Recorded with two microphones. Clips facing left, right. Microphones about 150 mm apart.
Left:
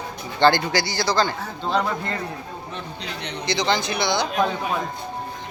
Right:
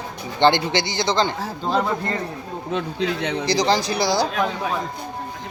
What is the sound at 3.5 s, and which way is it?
Speech, 35° right (ahead or behind).